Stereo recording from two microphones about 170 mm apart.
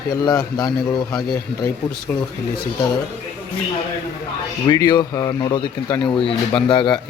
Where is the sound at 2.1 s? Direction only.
10° left (ahead or behind).